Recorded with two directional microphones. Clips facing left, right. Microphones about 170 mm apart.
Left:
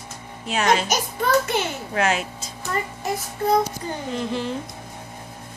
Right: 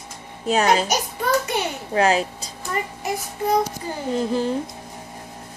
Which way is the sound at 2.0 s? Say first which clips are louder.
Right 4 dB; 35° right (ahead or behind).